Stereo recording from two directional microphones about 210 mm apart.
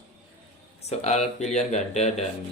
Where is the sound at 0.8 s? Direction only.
30° left (ahead or behind).